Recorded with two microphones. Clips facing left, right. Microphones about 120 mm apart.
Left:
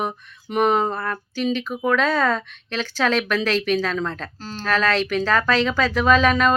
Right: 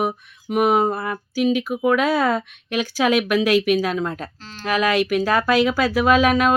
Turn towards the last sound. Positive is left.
turn(degrees=-10)  # may be behind; listen again after turning